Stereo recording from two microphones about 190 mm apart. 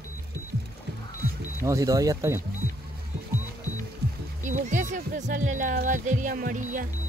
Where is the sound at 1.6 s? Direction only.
15° right (ahead or behind).